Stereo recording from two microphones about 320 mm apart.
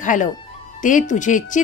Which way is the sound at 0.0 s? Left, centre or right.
Left.